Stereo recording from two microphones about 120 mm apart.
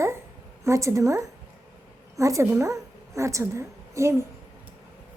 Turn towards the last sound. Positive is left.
turn(degrees=-25)  # may be behind; listen again after turning